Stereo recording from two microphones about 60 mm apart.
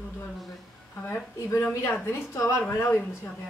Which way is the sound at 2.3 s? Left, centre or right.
Left.